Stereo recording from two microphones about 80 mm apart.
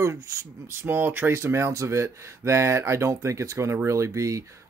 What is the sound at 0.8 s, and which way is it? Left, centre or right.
Speech, right.